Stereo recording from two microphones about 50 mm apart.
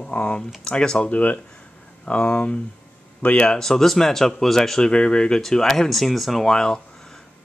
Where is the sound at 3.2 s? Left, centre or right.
Left.